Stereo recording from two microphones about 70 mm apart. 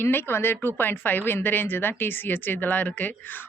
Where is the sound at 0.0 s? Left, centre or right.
Left.